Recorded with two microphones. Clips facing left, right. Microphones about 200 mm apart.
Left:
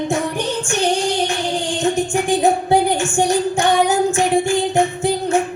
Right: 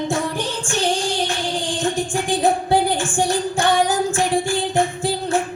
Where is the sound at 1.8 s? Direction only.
20° left (ahead or behind).